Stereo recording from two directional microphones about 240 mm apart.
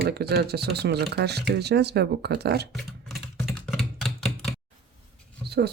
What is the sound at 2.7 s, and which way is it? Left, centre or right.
Computer keyboard, centre.